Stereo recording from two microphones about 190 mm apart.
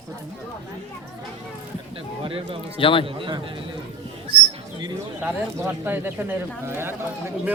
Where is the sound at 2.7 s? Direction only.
30° left (ahead or behind).